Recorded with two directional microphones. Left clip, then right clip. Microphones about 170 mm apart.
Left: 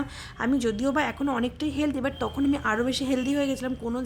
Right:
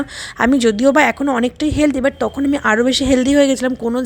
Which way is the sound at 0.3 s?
45° right (ahead or behind).